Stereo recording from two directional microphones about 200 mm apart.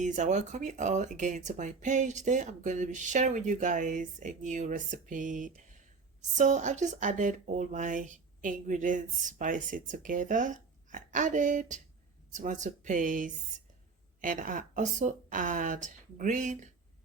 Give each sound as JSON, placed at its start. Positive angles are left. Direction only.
{"t": 0.0, "sound": "speech", "side_deg": -40}